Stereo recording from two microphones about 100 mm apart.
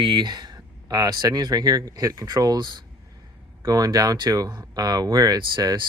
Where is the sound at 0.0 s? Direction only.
50° right (ahead or behind).